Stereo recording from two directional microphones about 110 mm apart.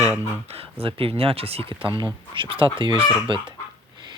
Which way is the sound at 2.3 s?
50° right (ahead or behind).